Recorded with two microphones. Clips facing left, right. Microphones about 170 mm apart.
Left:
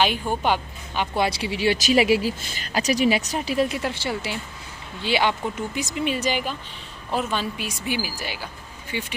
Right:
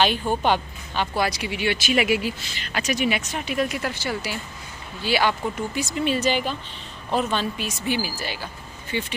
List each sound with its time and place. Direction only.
0.0 s a woman's voice: 10° left (ahead or behind)
1.1 s speech: 25° left (ahead or behind); by 9.1 s 10° left (ahead or behind)